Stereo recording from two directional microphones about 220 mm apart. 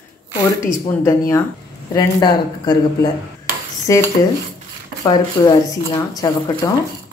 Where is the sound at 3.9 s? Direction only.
15° left (ahead or behind).